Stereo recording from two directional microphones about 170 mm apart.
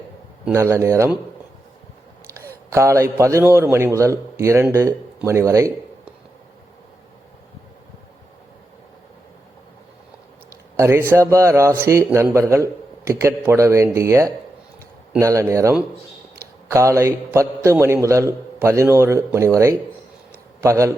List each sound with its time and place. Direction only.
0.5 s a man's voice: 15° right (ahead or behind)
2.6 s a man's voice: 15° right (ahead or behind)
10.8 s a man's voice: 15° right (ahead or behind)